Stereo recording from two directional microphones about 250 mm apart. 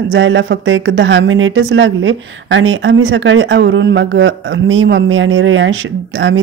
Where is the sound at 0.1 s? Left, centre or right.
Right.